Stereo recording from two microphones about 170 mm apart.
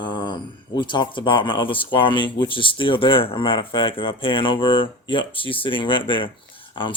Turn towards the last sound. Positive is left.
turn(degrees=30)  # may be behind; listen again after turning